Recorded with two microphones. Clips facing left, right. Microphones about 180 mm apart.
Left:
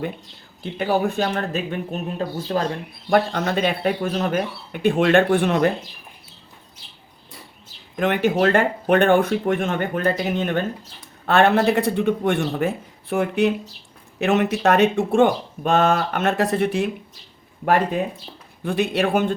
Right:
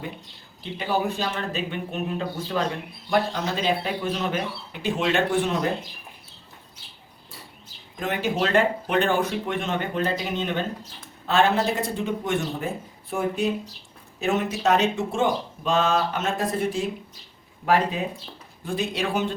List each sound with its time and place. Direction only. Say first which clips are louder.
0.6 s speech: left 5 dB; 50° left (ahead or behind)
3.1 s speech: left 5 dB; 60° left (ahead or behind)
7.9 s speech: left 6 dB; 70° left (ahead or behind)
18.6 s speech: left 6 dB; 65° left (ahead or behind)